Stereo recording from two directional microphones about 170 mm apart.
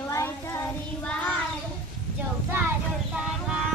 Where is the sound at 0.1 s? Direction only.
15° left (ahead or behind).